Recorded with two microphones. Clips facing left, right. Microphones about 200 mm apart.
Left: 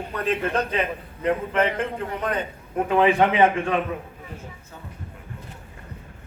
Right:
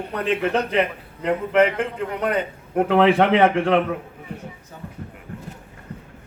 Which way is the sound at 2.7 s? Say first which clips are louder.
Right 3 dB; 70° right (ahead or behind).